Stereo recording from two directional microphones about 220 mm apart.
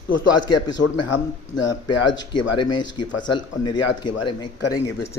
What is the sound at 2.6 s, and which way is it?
Speech, 20° left (ahead or behind).